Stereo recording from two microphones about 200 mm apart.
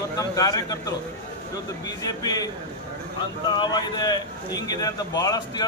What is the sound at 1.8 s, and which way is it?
Speech, 20° left (ahead or behind).